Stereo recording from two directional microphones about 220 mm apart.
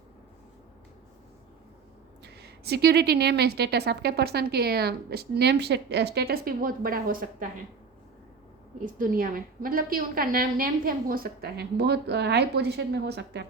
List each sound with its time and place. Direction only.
2.2 s a woman's voice: 50° right (ahead or behind)
8.8 s a woman's voice: 40° right (ahead or behind)